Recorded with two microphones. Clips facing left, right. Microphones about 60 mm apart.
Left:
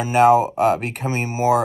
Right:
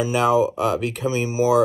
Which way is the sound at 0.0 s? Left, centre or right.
Left.